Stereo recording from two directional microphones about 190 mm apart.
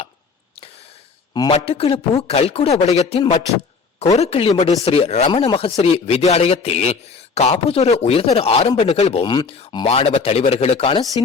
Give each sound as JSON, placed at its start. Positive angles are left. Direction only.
{"t": 1.3, "sound": "speech", "side_deg": 25}
{"t": 9.2, "sound": "speech", "side_deg": 20}